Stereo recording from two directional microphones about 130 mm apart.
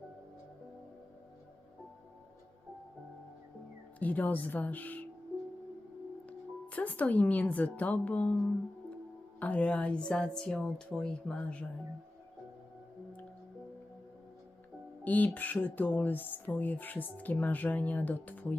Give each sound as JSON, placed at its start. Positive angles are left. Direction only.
{"t": 4.0, "sound": "speech", "side_deg": 10}
{"t": 6.2, "sound": "speech", "side_deg": 10}
{"t": 9.4, "sound": "speech", "side_deg": 10}
{"t": 15.0, "sound": "speech", "side_deg": 15}